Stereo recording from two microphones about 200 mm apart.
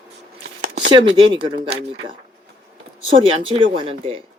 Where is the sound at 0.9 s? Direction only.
25° right (ahead or behind).